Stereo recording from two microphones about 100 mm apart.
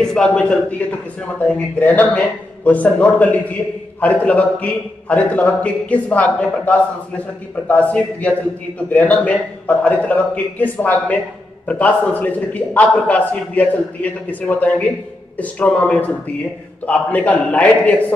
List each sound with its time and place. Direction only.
0.0 s a man's voice: 10° left (ahead or behind)